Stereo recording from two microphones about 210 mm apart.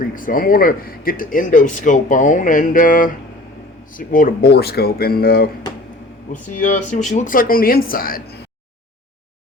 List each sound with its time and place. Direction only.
0.0 s speech: 40° left (ahead or behind)
6.5 s speech: 35° left (ahead or behind)